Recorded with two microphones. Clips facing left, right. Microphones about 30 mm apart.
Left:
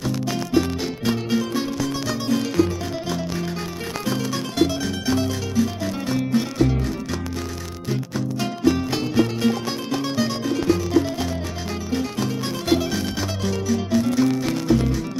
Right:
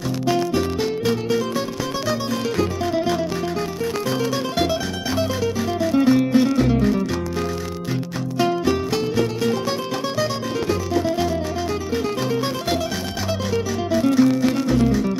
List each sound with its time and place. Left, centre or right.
0.6 s music: centre
5.1 s music: centre
8.4 s music: centre
8.9 s music: centre
10.7 s music: centre
13.7 s music: centre